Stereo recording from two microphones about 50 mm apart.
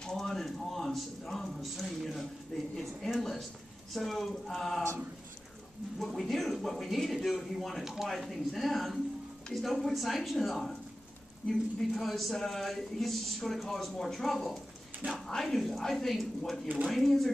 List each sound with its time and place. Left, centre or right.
0.0 s a sound: centre
3.1 s speech: centre
5.9 s speech: centre